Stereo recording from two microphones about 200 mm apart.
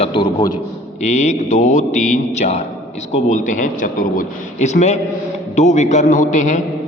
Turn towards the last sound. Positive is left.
turn(degrees=35)  # may be behind; listen again after turning